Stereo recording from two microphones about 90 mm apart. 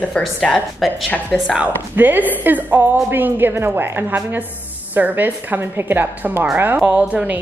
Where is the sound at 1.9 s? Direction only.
20° right (ahead or behind).